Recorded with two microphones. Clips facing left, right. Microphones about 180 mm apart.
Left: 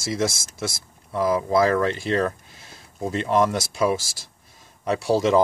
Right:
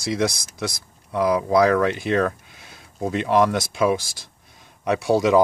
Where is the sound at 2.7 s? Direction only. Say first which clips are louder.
Right 2 dB; 15° right (ahead or behind).